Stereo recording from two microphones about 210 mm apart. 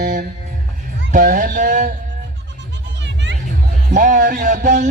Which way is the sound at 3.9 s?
40° right (ahead or behind).